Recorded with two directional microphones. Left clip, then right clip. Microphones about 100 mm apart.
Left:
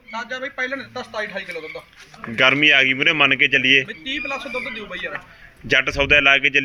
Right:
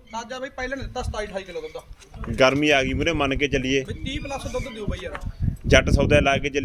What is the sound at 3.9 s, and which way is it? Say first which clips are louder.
Speech: left 6 dB; 35° right (ahead or behind).